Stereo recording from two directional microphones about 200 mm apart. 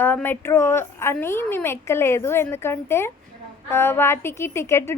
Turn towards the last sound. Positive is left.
turn(degrees=10)  # may be behind; listen again after turning